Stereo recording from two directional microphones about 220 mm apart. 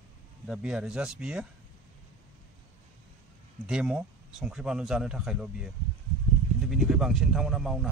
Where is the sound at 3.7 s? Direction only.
5° right (ahead or behind).